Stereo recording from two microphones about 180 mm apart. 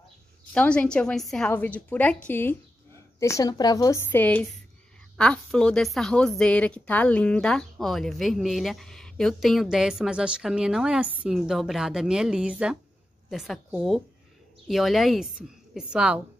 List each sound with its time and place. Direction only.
0.6 s a woman's voice: 5° left (ahead or behind)